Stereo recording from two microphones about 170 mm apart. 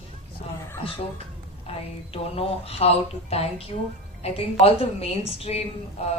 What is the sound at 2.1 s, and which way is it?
A woman's voice, 35° left (ahead or behind).